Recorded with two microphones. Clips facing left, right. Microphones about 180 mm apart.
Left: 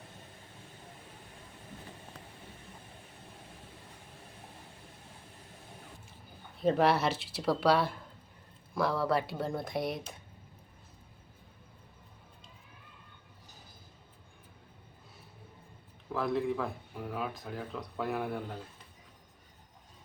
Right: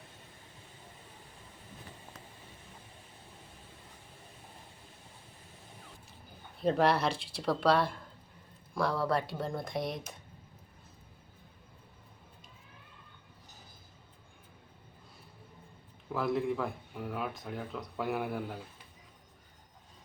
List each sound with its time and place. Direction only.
6.6 s speech: centre (ahead or behind)
16.1 s speech: centre (ahead or behind)